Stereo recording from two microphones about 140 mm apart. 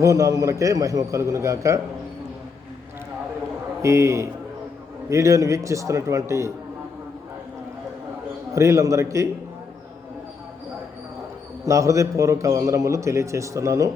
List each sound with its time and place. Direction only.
0.0 s a man's voice: 25° right (ahead or behind)
3.8 s a man's voice: 20° right (ahead or behind)
8.5 s a man's voice: 20° right (ahead or behind)
11.6 s a man's voice: 20° right (ahead or behind)